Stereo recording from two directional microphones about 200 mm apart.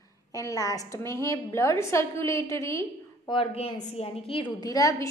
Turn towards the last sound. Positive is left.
turn(degrees=15)  # may be behind; listen again after turning